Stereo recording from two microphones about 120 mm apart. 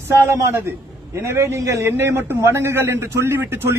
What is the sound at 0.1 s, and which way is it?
A man's voice, 15° right (ahead or behind).